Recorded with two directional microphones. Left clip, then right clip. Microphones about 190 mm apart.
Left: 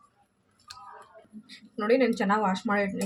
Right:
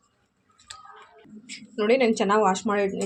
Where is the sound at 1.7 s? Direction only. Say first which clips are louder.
Right 3 dB; 35° right (ahead or behind).